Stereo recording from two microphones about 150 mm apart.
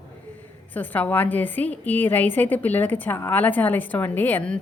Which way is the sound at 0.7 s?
10° left (ahead or behind).